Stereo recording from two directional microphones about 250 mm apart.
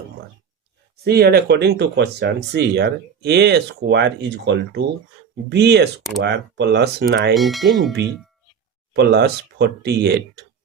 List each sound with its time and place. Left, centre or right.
1.0 s speech: right
7.3 s speech: centre
8.9 s speech: right